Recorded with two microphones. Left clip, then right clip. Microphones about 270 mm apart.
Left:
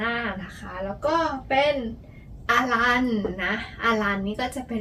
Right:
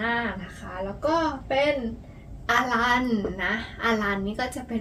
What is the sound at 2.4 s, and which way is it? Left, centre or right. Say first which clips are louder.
A woman's voice: left 1 dB; centre.